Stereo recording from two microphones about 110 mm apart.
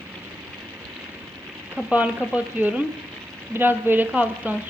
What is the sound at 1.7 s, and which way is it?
A woman's voice, 15° right (ahead or behind).